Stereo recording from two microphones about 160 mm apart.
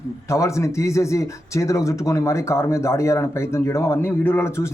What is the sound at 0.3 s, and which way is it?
A man's voice, 20° left (ahead or behind).